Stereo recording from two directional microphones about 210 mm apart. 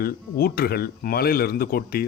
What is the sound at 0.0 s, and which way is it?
Speech, 45° left (ahead or behind).